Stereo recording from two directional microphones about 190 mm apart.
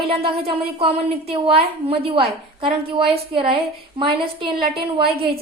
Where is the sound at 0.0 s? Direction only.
30° right (ahead or behind).